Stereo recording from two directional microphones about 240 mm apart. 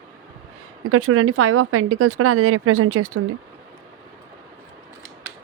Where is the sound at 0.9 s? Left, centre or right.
Right.